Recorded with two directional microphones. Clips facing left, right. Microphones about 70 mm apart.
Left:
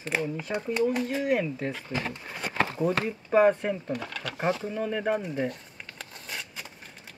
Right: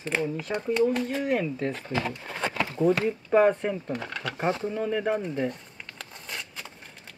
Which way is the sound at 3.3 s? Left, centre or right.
Centre.